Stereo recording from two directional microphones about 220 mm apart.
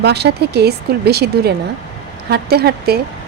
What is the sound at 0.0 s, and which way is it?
Speech, 50° right (ahead or behind).